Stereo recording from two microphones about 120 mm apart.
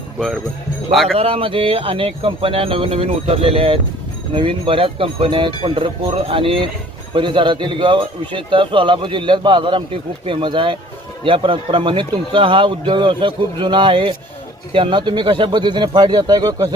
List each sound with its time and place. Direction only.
0.9 s speech: centre (ahead or behind)
1.1 s a man's voice: 55° right (ahead or behind); by 16.6 s 35° right (ahead or behind)